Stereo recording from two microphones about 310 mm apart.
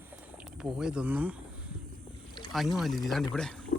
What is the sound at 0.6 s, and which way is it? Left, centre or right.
Speech, centre.